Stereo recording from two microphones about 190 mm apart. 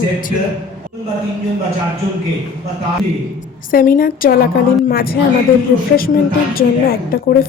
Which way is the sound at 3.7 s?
50° left (ahead or behind).